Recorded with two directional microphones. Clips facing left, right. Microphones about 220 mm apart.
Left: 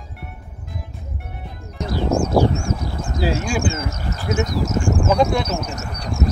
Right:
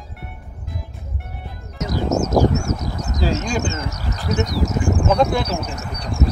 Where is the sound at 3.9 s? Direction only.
40° right (ahead or behind).